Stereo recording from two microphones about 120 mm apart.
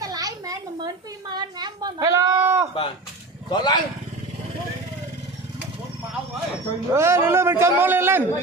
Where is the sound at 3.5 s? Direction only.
40° left (ahead or behind).